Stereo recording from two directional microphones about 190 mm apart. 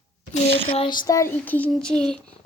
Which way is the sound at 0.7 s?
30° left (ahead or behind).